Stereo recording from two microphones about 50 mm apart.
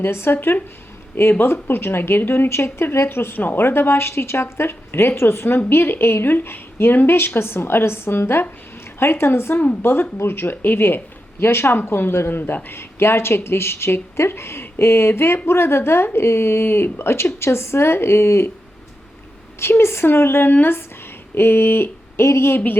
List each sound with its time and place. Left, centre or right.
0.0 s a woman's voice: left
3.1 s a woman's voice: left
19.5 s a woman's voice: left
20.5 s speech: left